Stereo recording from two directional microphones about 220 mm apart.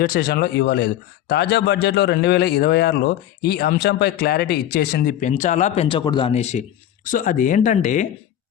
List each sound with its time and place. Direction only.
0.0 s a man's voice: 45° left (ahead or behind)